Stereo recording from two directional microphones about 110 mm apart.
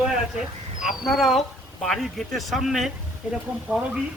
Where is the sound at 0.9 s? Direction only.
Centre (ahead or behind).